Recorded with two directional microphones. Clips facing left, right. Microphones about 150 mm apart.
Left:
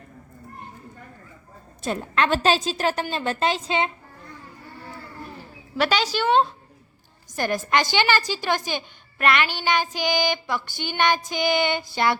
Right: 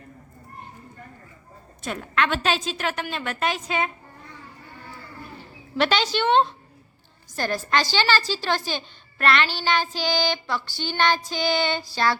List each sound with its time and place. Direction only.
1.8 s a woman's voice: 30° left (ahead or behind)
5.7 s a woman's voice: 10° left (ahead or behind)
7.3 s a woman's voice: 20° left (ahead or behind)